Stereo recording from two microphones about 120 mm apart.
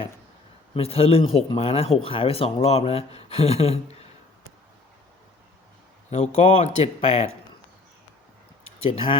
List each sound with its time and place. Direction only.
0.7 s speech: 55° left (ahead or behind)
6.1 s speech: 60° left (ahead or behind)
8.8 s speech: 50° left (ahead or behind)